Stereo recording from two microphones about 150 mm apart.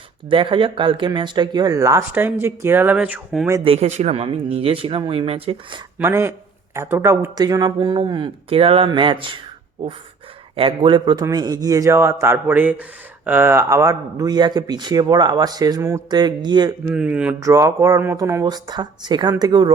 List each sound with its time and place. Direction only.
0.3 s speech: 35° right (ahead or behind); by 3.5 s 10° right (ahead or behind)
3.6 s speech: 40° right (ahead or behind)
6.0 s speech: 15° right (ahead or behind); by 9.1 s 35° right (ahead or behind)
10.6 s speech: 35° right (ahead or behind)
16.9 s speech: 5° right (ahead or behind)
17.4 s speech: 20° right (ahead or behind)